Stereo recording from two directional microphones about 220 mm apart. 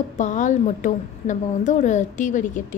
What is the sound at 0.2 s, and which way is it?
A woman's voice, 35° left (ahead or behind).